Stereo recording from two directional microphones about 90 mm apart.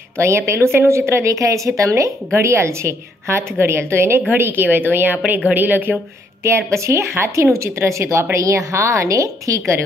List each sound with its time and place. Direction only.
0.2 s a woman's voice: 30° right (ahead or behind)